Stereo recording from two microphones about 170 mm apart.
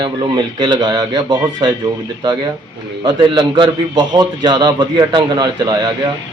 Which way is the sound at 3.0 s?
25° right (ahead or behind).